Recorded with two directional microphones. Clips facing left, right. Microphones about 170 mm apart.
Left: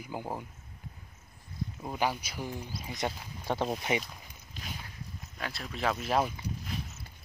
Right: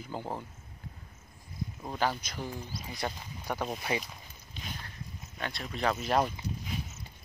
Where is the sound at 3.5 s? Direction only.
25° left (ahead or behind).